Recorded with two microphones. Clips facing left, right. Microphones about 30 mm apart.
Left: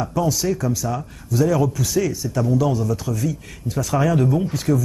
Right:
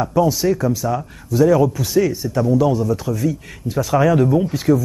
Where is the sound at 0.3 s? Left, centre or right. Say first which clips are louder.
Right 4 dB; right.